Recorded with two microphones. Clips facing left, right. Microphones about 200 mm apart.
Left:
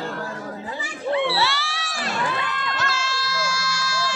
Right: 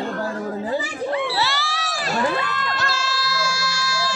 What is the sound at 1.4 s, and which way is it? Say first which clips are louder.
Crowd: right 1 dB; 35° right (ahead or behind).